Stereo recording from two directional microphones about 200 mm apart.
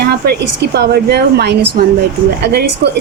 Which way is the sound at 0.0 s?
55° right (ahead or behind).